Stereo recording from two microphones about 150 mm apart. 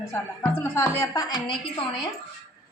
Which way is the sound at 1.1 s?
30° left (ahead or behind).